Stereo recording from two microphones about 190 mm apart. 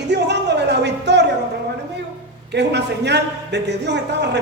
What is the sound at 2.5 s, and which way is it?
A woman's voice, 65° right (ahead or behind).